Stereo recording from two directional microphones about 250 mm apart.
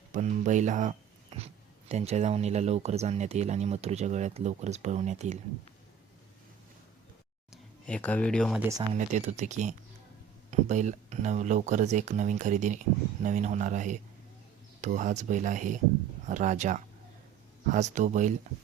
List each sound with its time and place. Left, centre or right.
0.1 s a sound: right
1.9 s speech: right
7.5 s speech: centre
8.9 s speech: right